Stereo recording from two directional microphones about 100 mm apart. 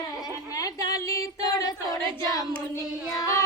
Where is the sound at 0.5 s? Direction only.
35° left (ahead or behind).